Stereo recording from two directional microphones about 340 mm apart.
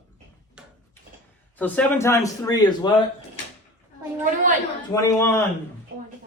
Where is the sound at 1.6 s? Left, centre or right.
Centre.